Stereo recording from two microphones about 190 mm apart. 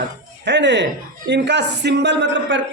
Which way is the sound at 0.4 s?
65° right (ahead or behind).